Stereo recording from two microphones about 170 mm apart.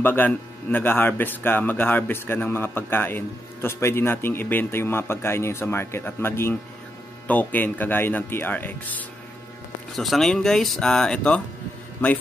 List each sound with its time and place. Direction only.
0.0 s a man's voice: 10° left (ahead or behind)